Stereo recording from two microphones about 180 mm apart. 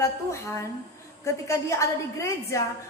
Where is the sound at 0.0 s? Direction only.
15° left (ahead or behind).